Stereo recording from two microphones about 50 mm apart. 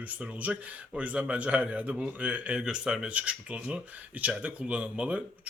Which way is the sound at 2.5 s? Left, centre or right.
Centre.